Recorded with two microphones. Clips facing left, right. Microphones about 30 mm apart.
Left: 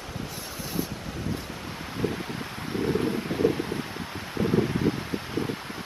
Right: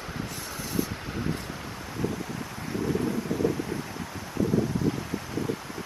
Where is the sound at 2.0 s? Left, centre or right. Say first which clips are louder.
Left 1 dB; left.